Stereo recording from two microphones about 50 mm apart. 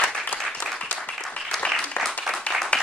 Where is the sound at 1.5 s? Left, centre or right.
Centre.